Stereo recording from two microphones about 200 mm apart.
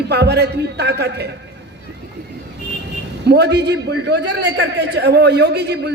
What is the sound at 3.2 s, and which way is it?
A woman's voice, 55° right (ahead or behind).